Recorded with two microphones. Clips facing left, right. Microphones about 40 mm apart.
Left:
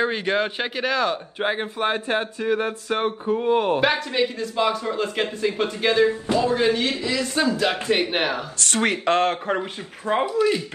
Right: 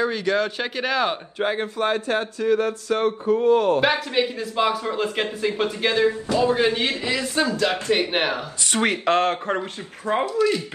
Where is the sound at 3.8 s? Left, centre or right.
Centre.